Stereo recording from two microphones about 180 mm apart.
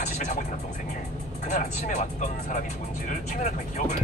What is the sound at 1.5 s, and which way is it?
Speech, 40° left (ahead or behind).